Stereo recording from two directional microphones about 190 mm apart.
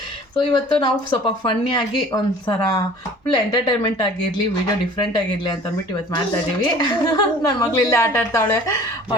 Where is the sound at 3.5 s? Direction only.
20° left (ahead or behind).